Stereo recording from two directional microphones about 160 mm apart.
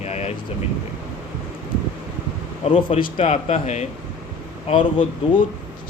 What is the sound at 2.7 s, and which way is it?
Speech, 35° left (ahead or behind).